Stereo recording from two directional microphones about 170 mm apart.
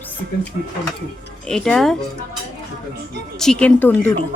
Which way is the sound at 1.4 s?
5° left (ahead or behind).